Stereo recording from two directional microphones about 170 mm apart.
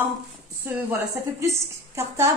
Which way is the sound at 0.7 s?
15° right (ahead or behind).